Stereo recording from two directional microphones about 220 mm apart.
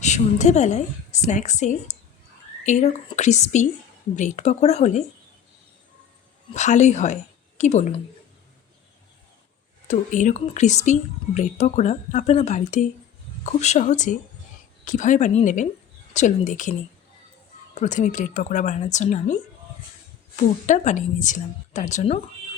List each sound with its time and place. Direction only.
0.0 s speech: 30° left (ahead or behind)
6.5 s speech: 30° left (ahead or behind)
9.8 s speech: 35° left (ahead or behind)
17.7 s speech: 35° left (ahead or behind)